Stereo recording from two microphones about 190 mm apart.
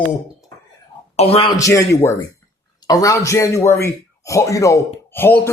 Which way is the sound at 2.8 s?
20° left (ahead or behind).